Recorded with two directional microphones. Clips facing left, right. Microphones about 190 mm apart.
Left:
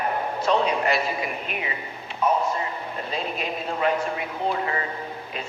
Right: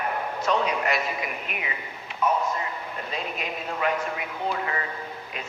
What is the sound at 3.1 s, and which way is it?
A man's voice, 30° left (ahead or behind).